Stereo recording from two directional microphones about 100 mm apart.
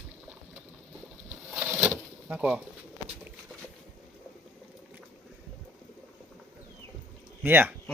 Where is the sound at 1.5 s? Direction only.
10° right (ahead or behind).